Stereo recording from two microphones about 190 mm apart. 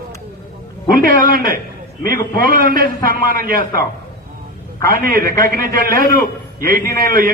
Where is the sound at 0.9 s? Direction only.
50° right (ahead or behind).